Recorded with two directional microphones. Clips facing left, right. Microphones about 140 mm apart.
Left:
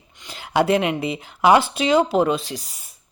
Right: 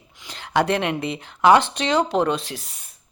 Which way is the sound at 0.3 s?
5° left (ahead or behind).